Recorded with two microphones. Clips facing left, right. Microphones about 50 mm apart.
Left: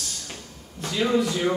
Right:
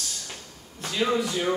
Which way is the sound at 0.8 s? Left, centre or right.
Centre.